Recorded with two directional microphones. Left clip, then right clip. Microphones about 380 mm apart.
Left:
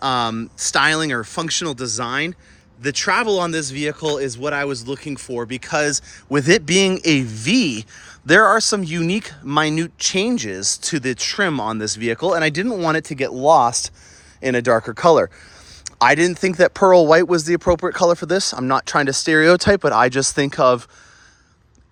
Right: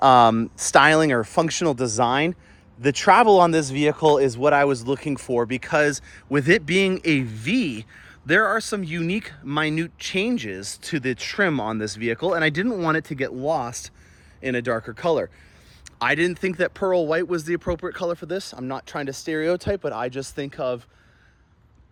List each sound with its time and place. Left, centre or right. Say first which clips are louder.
0.0 s speech: right 6 dB; centre